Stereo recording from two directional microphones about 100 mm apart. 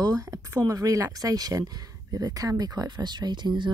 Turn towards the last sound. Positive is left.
turn(degrees=-50)  # may be behind; listen again after turning